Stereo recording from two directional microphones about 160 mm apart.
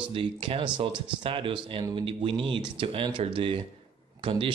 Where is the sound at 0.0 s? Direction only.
35° right (ahead or behind).